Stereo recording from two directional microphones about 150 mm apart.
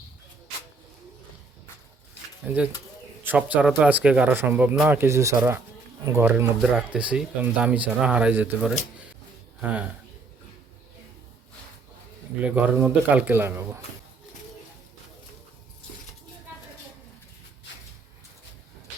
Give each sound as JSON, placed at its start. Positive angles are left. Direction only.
{"t": 2.5, "sound": "speech", "side_deg": -15}
{"t": 12.4, "sound": "speech", "side_deg": -10}